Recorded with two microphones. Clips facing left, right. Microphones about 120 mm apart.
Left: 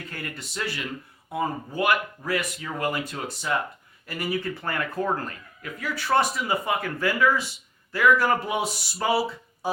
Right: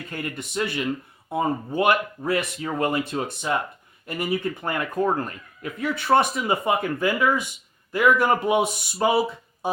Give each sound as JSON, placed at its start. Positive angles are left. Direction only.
{"t": 0.1, "sound": "speech", "side_deg": -20}